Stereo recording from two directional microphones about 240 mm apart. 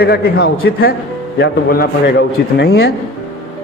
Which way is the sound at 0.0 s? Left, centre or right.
Left.